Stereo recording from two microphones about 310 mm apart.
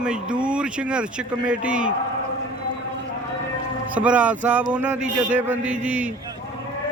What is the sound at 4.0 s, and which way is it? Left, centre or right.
Speech, centre.